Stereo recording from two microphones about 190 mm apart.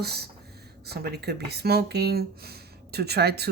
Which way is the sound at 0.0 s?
55° right (ahead or behind).